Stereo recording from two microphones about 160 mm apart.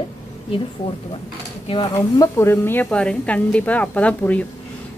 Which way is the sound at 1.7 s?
25° left (ahead or behind).